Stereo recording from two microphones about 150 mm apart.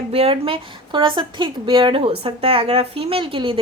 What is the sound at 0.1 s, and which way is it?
A woman's voice, 40° right (ahead or behind).